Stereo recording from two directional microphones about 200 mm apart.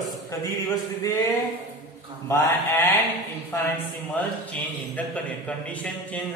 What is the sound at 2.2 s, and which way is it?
Speech, 10° left (ahead or behind).